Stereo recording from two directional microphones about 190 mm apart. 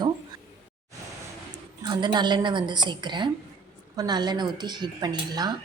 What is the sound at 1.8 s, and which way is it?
Speech, 20° right (ahead or behind).